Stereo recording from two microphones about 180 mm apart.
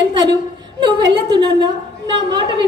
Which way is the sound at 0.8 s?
25° right (ahead or behind).